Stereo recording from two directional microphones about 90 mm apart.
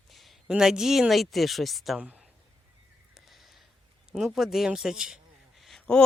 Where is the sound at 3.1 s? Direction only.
Centre (ahead or behind).